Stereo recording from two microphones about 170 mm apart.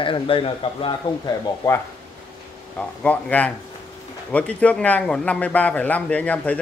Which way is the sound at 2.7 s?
10° left (ahead or behind).